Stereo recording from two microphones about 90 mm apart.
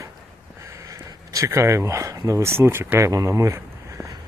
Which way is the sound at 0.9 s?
35° right (ahead or behind).